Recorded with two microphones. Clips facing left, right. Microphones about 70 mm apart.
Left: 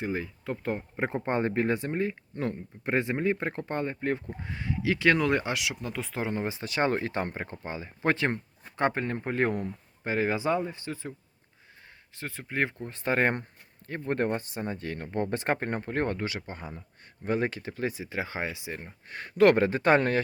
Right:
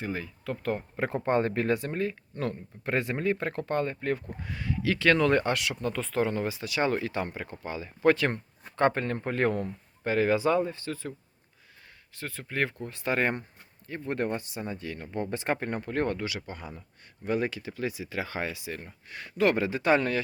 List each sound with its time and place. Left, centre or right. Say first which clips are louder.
0.0 s speech: left 2 dB; left
8.7 s speech: right 2 dB; centre
12.1 s speech: left 1 dB; left
12.9 s speech: left 3 dB; left
19.0 s speech: left 5 dB; left